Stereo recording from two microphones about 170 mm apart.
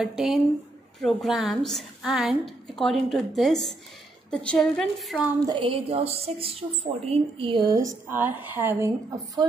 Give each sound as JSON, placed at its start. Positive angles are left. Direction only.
{"t": 0.0, "sound": "a woman's voice", "side_deg": -5}
{"t": 5.5, "sound": "a woman's voice", "side_deg": -30}